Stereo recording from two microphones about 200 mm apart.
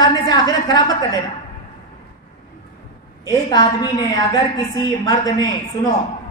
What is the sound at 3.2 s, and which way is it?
A woman's voice, 20° left (ahead or behind).